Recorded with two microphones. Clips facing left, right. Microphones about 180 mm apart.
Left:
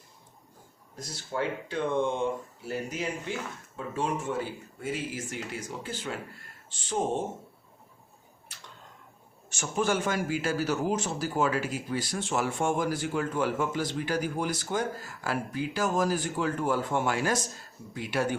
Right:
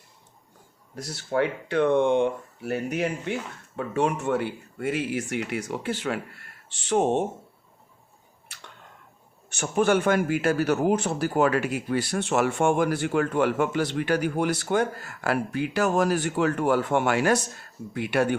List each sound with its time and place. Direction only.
0.9 s speech: 65° right (ahead or behind)
8.5 s a sound: 65° right (ahead or behind)
9.5 s speech: 60° right (ahead or behind)